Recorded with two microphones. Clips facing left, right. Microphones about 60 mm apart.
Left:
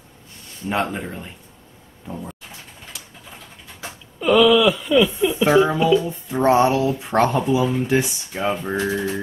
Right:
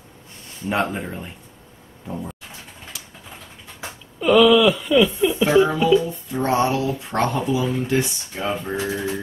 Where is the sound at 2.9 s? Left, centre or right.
Centre.